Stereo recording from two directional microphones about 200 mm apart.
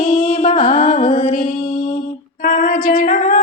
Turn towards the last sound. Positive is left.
turn(degrees=40)  # may be behind; listen again after turning